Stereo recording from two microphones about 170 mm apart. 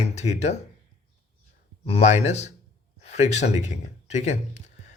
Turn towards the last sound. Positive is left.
turn(degrees=40)  # may be behind; listen again after turning